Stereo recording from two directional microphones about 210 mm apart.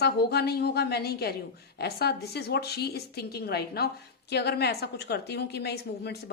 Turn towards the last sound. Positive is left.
turn(degrees=50)  # may be behind; listen again after turning